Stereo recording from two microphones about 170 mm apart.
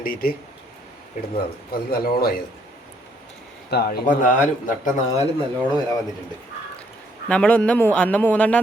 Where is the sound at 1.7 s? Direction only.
60° left (ahead or behind).